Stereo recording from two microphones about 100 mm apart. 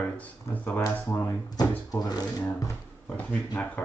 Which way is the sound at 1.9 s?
40° left (ahead or behind).